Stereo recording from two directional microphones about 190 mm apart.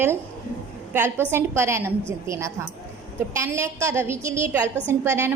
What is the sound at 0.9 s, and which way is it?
A woman's voice, 10° right (ahead or behind).